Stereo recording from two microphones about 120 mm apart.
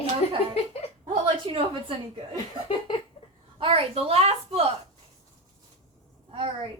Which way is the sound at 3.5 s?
50° right (ahead or behind).